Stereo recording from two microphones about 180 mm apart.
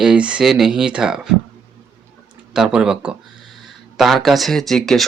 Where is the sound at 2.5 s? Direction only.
5° right (ahead or behind).